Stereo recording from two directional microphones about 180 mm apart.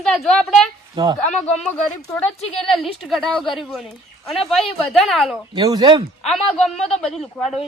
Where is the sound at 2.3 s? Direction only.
35° left (ahead or behind).